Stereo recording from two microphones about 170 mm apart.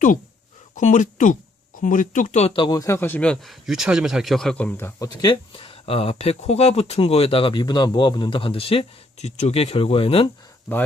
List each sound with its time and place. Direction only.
0.8 s speech: 45° left (ahead or behind)